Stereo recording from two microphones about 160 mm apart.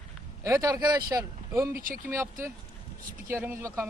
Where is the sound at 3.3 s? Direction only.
10° right (ahead or behind).